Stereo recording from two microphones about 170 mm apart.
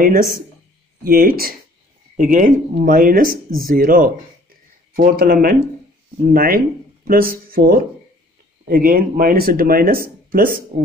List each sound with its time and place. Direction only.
0.0 s speech: 55° right (ahead or behind)